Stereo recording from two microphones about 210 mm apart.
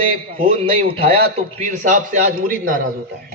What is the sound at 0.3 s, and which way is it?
A man's voice, 25° right (ahead or behind).